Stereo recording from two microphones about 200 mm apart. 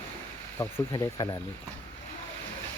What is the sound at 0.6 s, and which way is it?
Speech, 15° left (ahead or behind).